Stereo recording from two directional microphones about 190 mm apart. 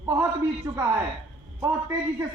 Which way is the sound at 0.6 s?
15° right (ahead or behind).